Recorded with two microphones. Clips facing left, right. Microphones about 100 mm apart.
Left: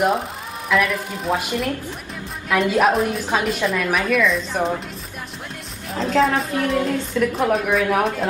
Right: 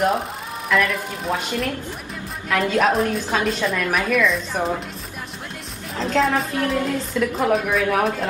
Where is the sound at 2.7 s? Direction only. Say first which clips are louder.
Even; 5° left (ahead or behind).